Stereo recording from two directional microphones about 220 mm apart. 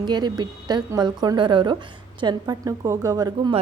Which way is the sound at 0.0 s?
20° right (ahead or behind).